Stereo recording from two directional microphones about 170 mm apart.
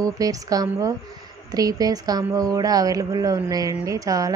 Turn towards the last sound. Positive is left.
turn(degrees=-20)  # may be behind; listen again after turning